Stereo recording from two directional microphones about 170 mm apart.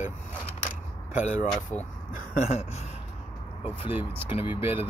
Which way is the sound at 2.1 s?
45° left (ahead or behind).